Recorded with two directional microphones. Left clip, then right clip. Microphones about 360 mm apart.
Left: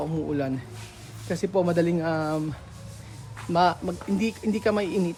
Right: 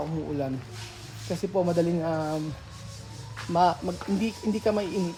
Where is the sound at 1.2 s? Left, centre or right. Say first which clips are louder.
Left 2 dB; centre.